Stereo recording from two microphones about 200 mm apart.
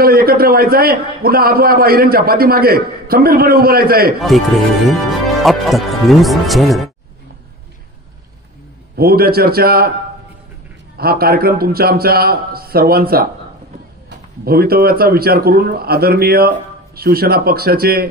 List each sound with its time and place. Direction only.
0.0 s a man's voice: 50° right (ahead or behind)
4.3 s speech: centre (ahead or behind)
8.9 s a man's voice: 50° right (ahead or behind)
11.0 s a man's voice: 50° right (ahead or behind)